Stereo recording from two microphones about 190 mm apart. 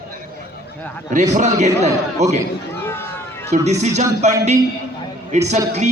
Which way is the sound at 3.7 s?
35° right (ahead or behind).